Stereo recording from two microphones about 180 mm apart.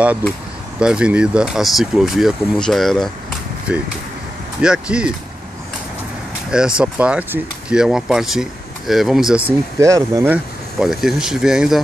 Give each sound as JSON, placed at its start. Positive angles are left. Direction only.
{"t": 0.7, "sound": "speech", "side_deg": -5}
{"t": 6.5, "sound": "speech", "side_deg": -5}
{"t": 9.8, "sound": "speech", "side_deg": -15}
{"t": 10.8, "sound": "speech", "side_deg": 0}